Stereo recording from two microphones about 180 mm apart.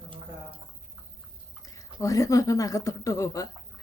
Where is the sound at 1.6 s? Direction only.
20° left (ahead or behind).